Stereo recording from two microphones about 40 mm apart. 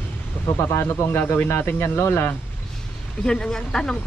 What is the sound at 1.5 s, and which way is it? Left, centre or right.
Speech, left.